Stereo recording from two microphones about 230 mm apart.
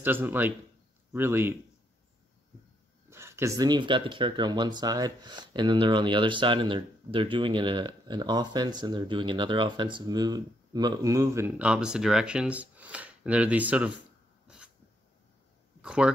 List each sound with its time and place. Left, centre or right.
0.0 s a man's voice: centre
3.1 s speech: centre
14.5 s a sound: centre
15.8 s speech: centre